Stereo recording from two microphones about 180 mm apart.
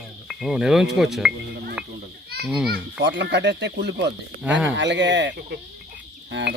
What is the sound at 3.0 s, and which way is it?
Speech, 75° right (ahead or behind).